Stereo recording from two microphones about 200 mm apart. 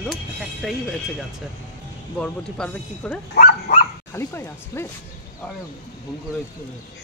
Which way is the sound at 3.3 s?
45° left (ahead or behind).